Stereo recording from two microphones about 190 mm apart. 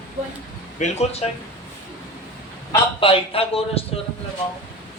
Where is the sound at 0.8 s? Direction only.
40° left (ahead or behind).